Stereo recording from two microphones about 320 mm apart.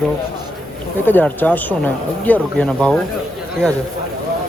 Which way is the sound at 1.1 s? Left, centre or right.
Centre.